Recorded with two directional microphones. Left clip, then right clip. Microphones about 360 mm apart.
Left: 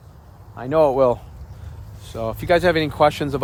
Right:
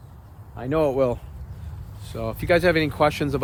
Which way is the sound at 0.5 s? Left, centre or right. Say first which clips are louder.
Left 5 dB; centre.